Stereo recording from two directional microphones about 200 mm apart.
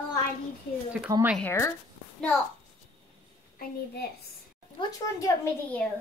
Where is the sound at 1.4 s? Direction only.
15° left (ahead or behind).